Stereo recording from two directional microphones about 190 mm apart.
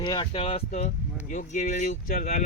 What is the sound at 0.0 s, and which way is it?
Speech, 25° left (ahead or behind).